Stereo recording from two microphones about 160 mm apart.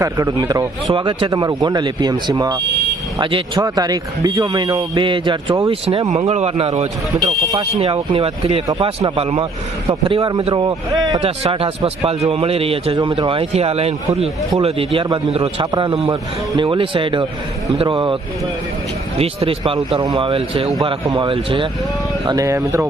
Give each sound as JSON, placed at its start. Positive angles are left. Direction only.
{"t": 0.0, "sound": "speech", "side_deg": -20}
{"t": 6.1, "sound": "speech", "side_deg": -40}
{"t": 19.2, "sound": "speech", "side_deg": -35}
{"t": 22.3, "sound": "speech", "side_deg": -20}